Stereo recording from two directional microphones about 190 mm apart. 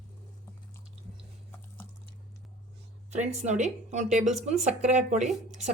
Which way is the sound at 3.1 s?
35° right (ahead or behind).